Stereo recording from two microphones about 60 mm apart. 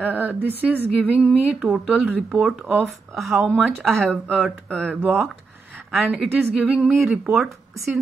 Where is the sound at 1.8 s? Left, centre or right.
Centre.